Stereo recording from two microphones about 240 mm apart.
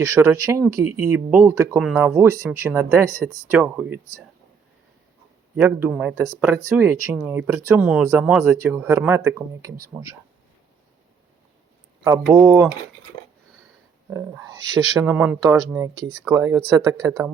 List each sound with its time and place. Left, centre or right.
0.0 s speech: centre
5.5 s speech: centre
12.0 s speech: centre
14.1 s speech: centre